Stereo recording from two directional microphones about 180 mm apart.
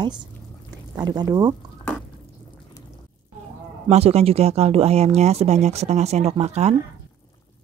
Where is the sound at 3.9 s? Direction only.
35° right (ahead or behind).